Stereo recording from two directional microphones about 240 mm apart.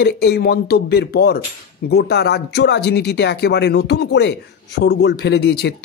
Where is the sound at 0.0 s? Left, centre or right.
Left.